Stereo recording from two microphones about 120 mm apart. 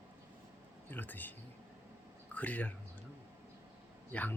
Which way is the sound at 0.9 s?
15° left (ahead or behind).